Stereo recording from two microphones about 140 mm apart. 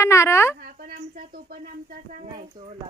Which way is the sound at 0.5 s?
90° right.